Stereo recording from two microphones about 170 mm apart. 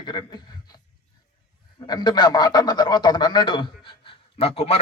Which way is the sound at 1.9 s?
25° left (ahead or behind).